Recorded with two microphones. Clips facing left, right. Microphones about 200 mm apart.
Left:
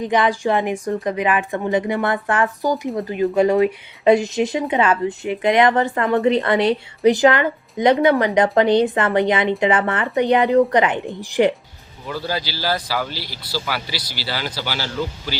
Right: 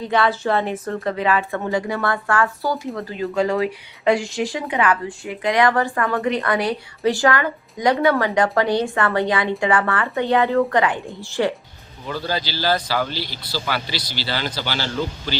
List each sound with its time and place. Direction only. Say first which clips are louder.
0.1 s a woman's voice: even; 15° left (ahead or behind)